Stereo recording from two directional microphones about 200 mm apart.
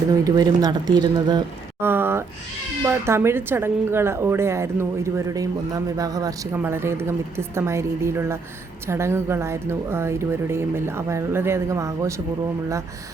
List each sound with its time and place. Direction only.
0.1 s a woman's voice: 20° right (ahead or behind)